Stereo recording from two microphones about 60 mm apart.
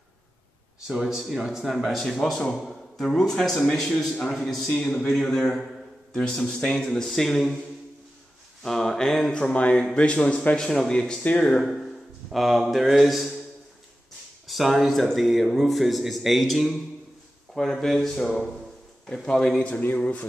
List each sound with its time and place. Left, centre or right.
0.8 s a man's voice: centre
8.6 s speech: centre
9.3 s a man's voice: centre
10.6 s a man's voice: centre
11.6 s speech: centre
14.5 s a man's voice: centre
20.0 s speech: left